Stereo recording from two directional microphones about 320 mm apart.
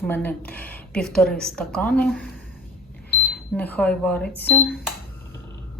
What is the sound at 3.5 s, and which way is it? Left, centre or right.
Speech, centre.